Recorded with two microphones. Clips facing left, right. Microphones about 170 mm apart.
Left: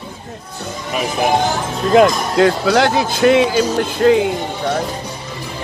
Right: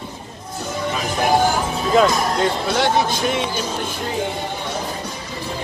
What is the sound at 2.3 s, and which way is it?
Speech, 90° left.